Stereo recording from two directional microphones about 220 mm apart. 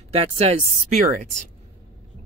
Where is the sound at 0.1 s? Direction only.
30° right (ahead or behind).